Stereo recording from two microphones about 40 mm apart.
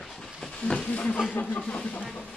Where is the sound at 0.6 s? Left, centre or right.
Centre.